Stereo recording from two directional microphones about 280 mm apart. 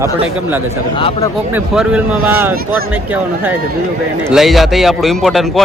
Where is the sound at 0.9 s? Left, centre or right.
Centre.